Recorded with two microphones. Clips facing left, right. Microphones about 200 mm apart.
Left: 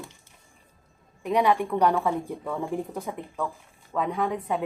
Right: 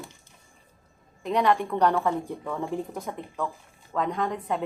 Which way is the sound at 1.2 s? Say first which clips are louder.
Left 1 dB; 10° left (ahead or behind).